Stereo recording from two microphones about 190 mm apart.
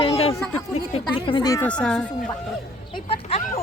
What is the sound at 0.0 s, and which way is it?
Music, 30° left (ahead or behind).